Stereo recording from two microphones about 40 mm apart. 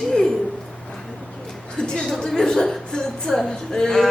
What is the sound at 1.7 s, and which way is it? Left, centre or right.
A woman's voice, centre.